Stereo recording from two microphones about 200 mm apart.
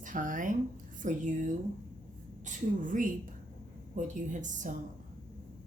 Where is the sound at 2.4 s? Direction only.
40° right (ahead or behind).